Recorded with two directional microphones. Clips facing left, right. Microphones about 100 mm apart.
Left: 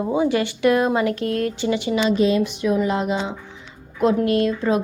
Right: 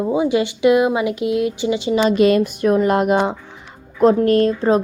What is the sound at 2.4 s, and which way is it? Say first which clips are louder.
Speech: right 4 dB; 50° right (ahead or behind).